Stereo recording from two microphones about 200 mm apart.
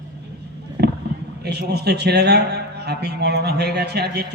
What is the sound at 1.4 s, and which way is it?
A man's voice, 55° right (ahead or behind).